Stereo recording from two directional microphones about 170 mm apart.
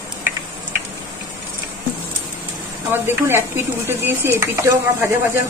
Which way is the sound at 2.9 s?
15° right (ahead or behind).